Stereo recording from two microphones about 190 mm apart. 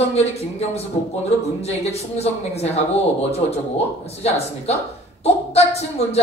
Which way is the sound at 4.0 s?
35° left (ahead or behind).